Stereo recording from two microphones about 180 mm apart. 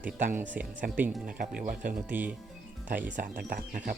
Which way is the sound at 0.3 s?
10° right (ahead or behind).